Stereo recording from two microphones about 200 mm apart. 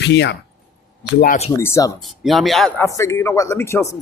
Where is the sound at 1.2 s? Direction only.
35° left (ahead or behind).